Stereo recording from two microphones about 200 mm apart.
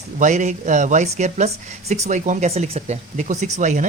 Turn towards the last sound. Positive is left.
turn(degrees=-40)  # may be behind; listen again after turning